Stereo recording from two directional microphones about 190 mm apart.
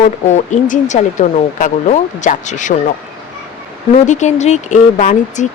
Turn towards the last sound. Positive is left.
turn(degrees=40)  # may be behind; listen again after turning